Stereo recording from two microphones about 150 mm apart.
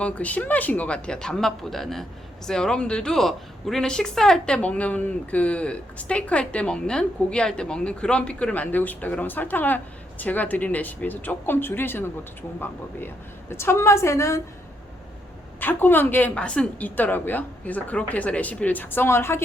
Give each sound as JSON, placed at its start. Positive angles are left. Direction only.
{"t": 0.0, "sound": "a woman's voice", "side_deg": 10}
{"t": 13.5, "sound": "a woman's voice", "side_deg": 15}
{"t": 15.6, "sound": "a woman's voice", "side_deg": 15}